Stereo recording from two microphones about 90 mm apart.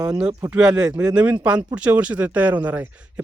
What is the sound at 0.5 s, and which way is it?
Speech, 10° right (ahead or behind).